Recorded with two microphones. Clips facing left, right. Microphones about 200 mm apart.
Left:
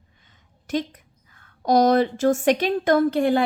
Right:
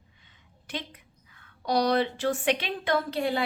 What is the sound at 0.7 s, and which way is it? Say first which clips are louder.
A woman's voice: left 12 dB; 45° left (ahead or behind).